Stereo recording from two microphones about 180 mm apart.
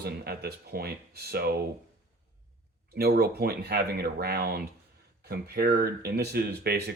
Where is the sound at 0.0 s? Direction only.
60° right (ahead or behind).